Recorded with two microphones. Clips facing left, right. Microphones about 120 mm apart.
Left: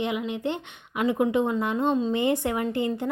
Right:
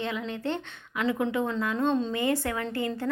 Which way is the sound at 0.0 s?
15° left (ahead or behind).